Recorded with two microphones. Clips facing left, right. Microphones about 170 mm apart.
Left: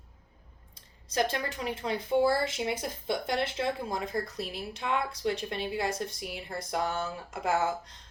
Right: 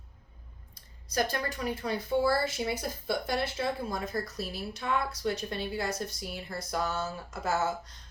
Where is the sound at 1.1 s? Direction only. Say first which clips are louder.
Left 1 dB; 25° left (ahead or behind).